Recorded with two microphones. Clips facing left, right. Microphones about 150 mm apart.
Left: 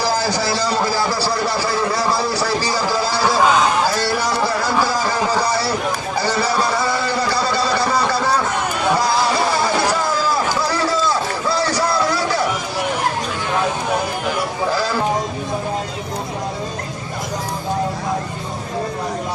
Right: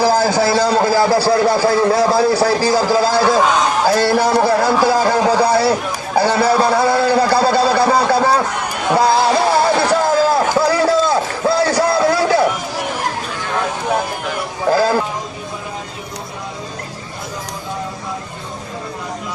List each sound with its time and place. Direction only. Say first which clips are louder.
0.0 s a man's voice: right 6 dB; 55° right (ahead or behind)
6.1 s a sound: right 7 dB; 55° right (ahead or behind)
10.0 s run: right 6 dB; 55° right (ahead or behind)
14.7 s music: right 10 dB; 50° right (ahead or behind)